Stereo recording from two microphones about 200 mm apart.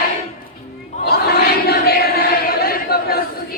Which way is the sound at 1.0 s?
50° left (ahead or behind).